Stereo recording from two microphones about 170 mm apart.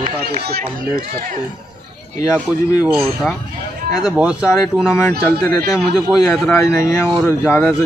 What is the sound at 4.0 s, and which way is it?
Speech, 5° right (ahead or behind).